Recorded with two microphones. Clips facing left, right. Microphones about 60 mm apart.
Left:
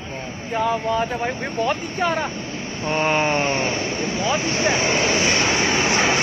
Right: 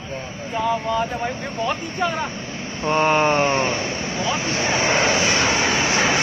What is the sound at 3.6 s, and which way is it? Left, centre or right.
Speech, centre.